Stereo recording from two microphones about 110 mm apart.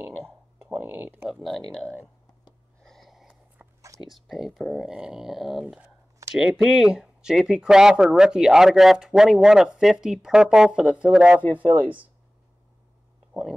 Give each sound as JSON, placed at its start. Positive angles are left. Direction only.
{"t": 0.7, "sound": "speech", "side_deg": -20}
{"t": 1.3, "sound": "speech", "side_deg": 0}
{"t": 2.8, "sound": "a sound", "side_deg": 0}
{"t": 3.6, "sound": "whispering", "side_deg": -15}
{"t": 4.0, "sound": "speech", "side_deg": 0}